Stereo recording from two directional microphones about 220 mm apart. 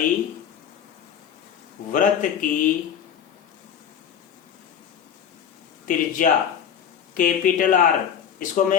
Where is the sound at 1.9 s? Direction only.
35° left (ahead or behind).